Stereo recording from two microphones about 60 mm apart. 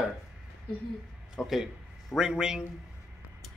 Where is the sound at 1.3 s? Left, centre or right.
Centre.